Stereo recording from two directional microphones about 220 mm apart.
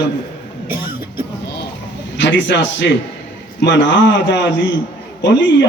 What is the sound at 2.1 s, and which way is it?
A man's voice, 55° left (ahead or behind).